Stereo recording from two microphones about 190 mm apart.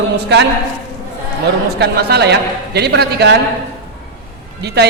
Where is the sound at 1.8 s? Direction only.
60° right (ahead or behind).